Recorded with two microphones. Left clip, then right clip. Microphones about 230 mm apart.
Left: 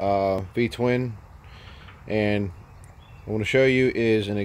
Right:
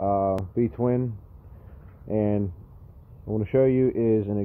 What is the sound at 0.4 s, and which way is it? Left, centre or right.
Speech, centre.